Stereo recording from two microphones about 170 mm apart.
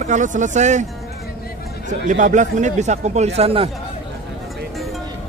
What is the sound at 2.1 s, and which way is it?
Speech, 45° right (ahead or behind).